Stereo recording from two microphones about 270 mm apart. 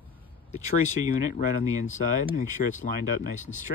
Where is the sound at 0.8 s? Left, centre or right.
Left.